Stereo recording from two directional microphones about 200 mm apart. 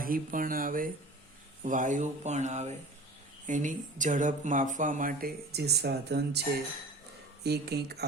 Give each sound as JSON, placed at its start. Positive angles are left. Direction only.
{"t": 0.0, "sound": "speech", "side_deg": -45}
{"t": 7.4, "sound": "speech", "side_deg": -55}